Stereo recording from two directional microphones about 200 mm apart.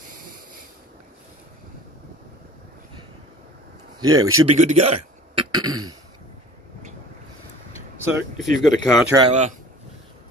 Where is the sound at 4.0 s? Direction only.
20° right (ahead or behind).